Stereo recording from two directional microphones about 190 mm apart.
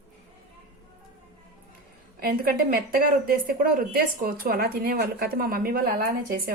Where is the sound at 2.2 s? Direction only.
50° right (ahead or behind).